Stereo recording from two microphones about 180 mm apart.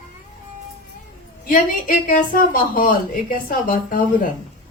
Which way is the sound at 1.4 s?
50° left (ahead or behind).